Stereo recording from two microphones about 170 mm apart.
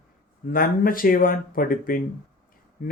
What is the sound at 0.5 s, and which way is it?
Speech, 55° left (ahead or behind).